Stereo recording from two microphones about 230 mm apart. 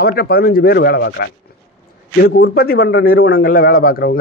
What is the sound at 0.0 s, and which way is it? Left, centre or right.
A man's voice, left.